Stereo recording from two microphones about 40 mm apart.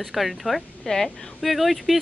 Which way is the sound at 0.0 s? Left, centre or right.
Centre.